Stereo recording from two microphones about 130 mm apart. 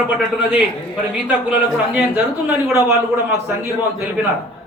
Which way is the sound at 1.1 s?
10° right (ahead or behind).